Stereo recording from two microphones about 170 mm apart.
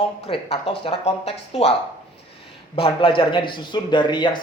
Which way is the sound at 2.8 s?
30° left (ahead or behind).